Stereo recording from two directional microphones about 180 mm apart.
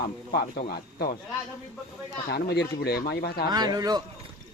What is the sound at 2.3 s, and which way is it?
Speech, 60° left (ahead or behind).